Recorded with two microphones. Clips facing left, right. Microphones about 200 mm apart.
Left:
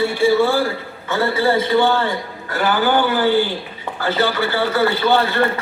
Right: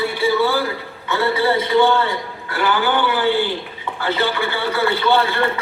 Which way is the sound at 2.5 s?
40° left (ahead or behind).